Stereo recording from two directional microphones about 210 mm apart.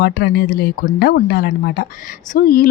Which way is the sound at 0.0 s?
45° left (ahead or behind).